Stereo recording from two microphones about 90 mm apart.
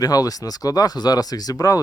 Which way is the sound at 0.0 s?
45° left (ahead or behind).